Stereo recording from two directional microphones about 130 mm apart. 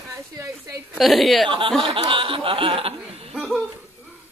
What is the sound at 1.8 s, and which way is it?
Speech, 40° right (ahead or behind).